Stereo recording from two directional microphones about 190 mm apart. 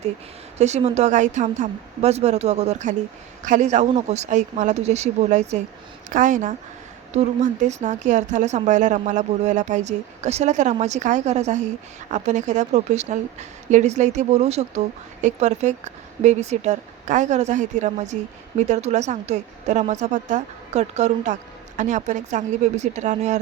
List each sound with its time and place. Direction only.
0.6 s a woman's voice: 35° right (ahead or behind)